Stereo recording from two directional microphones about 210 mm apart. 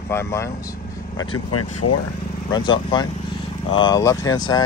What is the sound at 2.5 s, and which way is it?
Speech, 20° left (ahead or behind).